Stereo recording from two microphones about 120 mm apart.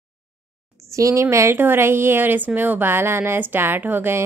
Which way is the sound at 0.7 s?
25° right (ahead or behind).